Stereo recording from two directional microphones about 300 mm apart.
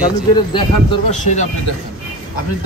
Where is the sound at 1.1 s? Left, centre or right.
Left.